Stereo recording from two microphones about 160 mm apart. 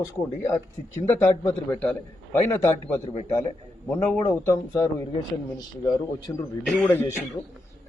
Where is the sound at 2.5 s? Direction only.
15° left (ahead or behind).